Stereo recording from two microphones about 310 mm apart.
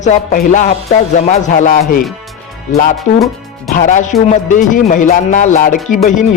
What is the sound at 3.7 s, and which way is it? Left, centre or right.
Speech, left.